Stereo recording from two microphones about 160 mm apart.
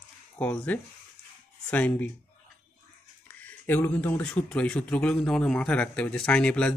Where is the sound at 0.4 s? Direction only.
10° left (ahead or behind).